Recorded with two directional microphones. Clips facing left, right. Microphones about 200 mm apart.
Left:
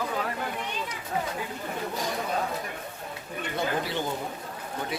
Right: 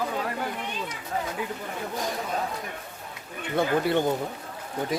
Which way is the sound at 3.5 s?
55° right (ahead or behind).